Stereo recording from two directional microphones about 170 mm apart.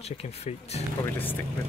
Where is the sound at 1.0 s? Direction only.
10° left (ahead or behind).